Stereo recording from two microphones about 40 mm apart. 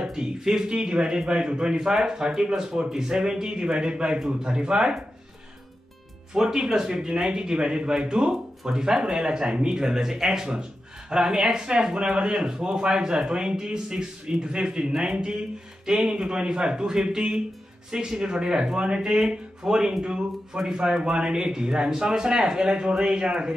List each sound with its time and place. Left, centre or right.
0.0 s a man's voice: centre
6.3 s a man's voice: centre